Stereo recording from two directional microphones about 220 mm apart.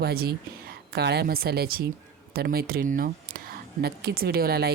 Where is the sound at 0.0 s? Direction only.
45° right (ahead or behind).